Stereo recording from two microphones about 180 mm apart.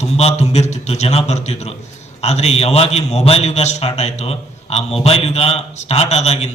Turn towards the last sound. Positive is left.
turn(degrees=35)  # may be behind; listen again after turning